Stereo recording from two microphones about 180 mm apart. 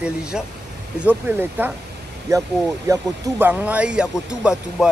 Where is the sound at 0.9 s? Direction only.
10° right (ahead or behind).